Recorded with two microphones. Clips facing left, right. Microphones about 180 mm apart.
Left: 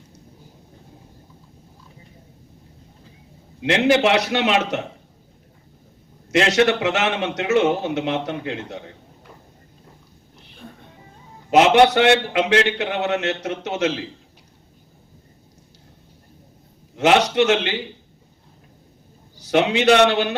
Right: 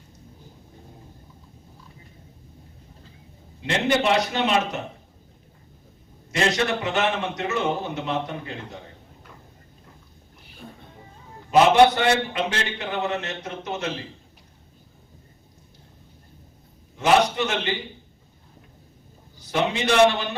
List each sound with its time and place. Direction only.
3.6 s a man's voice: 75° left (ahead or behind)
6.3 s a man's voice: 75° left (ahead or behind)
11.5 s a man's voice: 75° left (ahead or behind)
17.0 s a man's voice: 80° left
19.4 s a man's voice: 75° left (ahead or behind)